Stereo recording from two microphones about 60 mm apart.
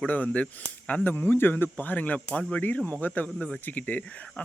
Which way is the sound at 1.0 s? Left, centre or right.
Left.